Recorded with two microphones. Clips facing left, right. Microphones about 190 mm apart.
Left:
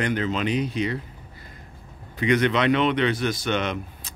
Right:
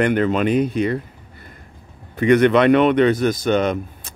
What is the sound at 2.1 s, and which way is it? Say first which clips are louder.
Speech: right 8 dB; 55° right (ahead or behind).